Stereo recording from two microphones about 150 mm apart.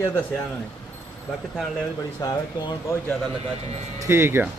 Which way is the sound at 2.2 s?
30° left (ahead or behind).